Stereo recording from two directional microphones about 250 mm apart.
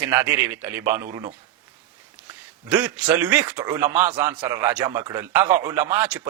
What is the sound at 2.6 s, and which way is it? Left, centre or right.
A man's voice, centre.